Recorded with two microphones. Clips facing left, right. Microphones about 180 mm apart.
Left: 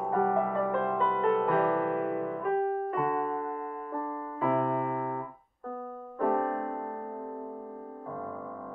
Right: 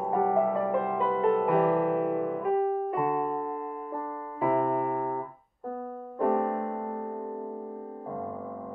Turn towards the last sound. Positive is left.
turn(degrees=-10)  # may be behind; listen again after turning